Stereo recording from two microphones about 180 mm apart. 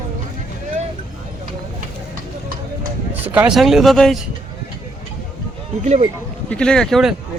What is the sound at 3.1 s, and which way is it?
Speech, 10° right (ahead or behind).